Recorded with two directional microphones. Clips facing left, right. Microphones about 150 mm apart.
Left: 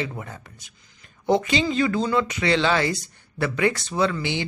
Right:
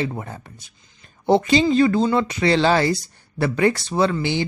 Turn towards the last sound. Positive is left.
turn(degrees=-35)  # may be behind; listen again after turning